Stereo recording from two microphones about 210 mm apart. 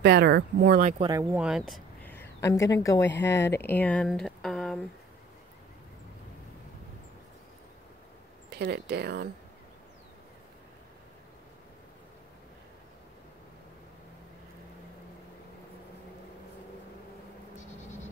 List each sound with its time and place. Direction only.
0.0 s speech: 50° right (ahead or behind)
1.0 s speech: 15° right (ahead or behind)
1.4 s a woman's voice: centre (ahead or behind)
8.5 s speech: 50° right (ahead or behind)